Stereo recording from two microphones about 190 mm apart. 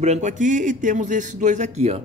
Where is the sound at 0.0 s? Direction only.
40° right (ahead or behind).